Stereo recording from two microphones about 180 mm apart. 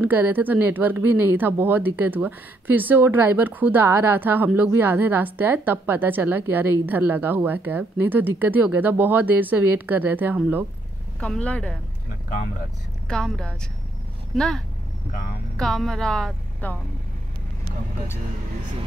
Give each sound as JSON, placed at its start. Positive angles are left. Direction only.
{"t": 0.0, "sound": "speech", "side_deg": -10}
{"t": 11.1, "sound": "speech", "side_deg": 5}
{"t": 13.1, "sound": "a woman's voice", "side_deg": 5}